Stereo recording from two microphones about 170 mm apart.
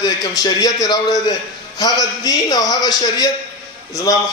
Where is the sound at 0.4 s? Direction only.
20° left (ahead or behind).